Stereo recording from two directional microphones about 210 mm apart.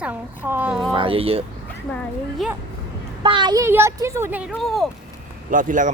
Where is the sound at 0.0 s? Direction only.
10° right (ahead or behind).